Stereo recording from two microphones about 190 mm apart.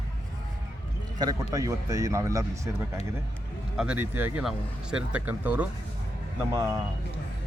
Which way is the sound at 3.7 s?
5° right (ahead or behind).